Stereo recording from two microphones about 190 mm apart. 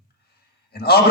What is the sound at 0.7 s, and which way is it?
Speech, 55° left (ahead or behind).